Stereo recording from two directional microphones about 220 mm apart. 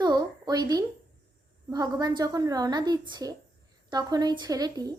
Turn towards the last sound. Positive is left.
turn(degrees=-15)  # may be behind; listen again after turning